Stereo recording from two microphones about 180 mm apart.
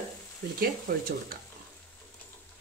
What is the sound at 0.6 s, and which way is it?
Speech, 55° right (ahead or behind).